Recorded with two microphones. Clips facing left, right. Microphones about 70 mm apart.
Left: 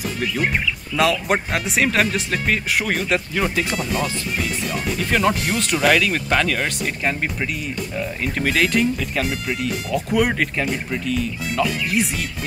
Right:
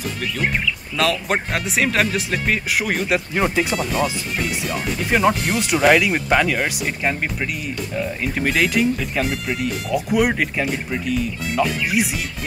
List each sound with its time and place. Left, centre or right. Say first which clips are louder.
0.9 s speech: left 2 dB; centre
3.3 s speech: right 4 dB; centre
3.7 s speech: right 2 dB; centre